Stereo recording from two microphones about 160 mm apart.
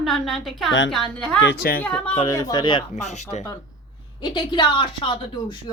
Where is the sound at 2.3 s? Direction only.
25° left (ahead or behind).